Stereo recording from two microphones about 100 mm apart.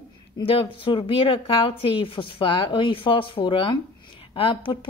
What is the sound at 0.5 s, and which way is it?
Speech, 60° left (ahead or behind).